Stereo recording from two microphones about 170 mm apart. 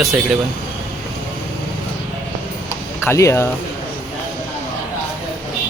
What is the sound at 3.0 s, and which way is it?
Speech, 15° left (ahead or behind).